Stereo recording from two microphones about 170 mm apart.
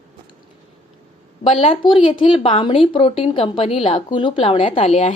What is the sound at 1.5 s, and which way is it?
A woman's voice, 35° left (ahead or behind).